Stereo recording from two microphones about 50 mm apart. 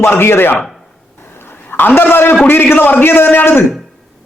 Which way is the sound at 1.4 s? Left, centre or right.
Left.